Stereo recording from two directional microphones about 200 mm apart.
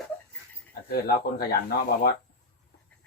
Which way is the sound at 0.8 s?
50° left (ahead or behind).